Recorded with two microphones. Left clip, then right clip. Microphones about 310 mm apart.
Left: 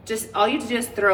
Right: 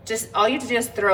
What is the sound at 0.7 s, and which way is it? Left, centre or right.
Speech, centre.